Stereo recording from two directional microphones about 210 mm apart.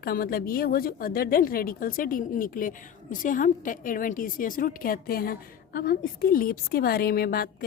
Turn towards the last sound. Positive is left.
turn(degrees=45)  # may be behind; listen again after turning